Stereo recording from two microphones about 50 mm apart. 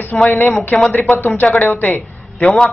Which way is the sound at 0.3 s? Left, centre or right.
Left.